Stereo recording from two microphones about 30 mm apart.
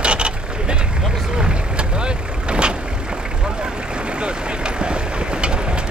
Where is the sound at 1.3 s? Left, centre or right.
Right.